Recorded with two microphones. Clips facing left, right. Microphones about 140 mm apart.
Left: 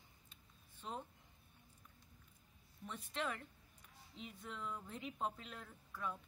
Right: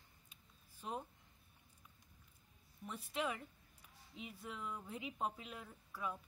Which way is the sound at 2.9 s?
5° right (ahead or behind).